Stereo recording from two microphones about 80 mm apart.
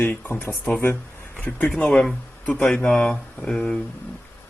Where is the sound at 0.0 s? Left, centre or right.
Left.